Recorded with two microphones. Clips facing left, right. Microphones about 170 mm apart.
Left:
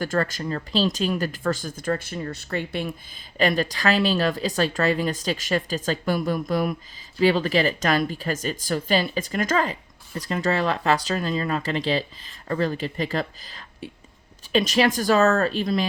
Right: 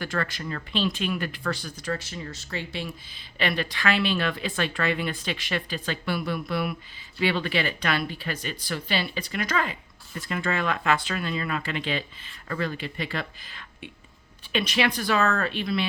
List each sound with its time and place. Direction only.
0.0 s speech: 45° left (ahead or behind)
3.3 s speech: 40° left (ahead or behind)